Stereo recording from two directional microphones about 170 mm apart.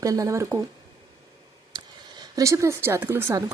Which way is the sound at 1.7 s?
25° right (ahead or behind).